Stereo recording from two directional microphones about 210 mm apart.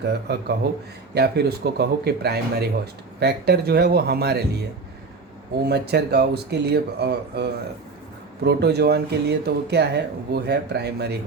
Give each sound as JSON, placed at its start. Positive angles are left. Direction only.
{"t": 0.0, "sound": "speech", "side_deg": -50}
{"t": 5.6, "sound": "speech", "side_deg": -50}